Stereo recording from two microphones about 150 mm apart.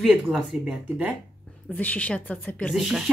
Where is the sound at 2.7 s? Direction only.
Centre (ahead or behind).